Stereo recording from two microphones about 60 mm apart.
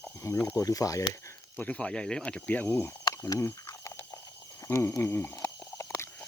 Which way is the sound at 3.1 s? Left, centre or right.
Left.